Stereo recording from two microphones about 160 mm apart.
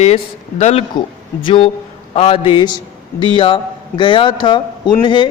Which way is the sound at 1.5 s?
35° left (ahead or behind).